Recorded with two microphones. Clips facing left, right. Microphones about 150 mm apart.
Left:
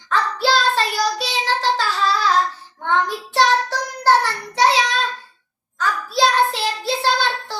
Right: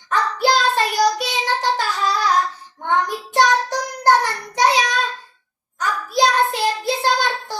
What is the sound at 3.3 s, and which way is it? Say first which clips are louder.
Child singing: right 1 dB; 15° right (ahead or behind).